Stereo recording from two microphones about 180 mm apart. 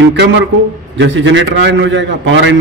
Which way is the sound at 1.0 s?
90° right.